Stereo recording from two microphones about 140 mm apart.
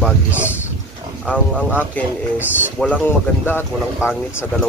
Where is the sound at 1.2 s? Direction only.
Centre (ahead or behind).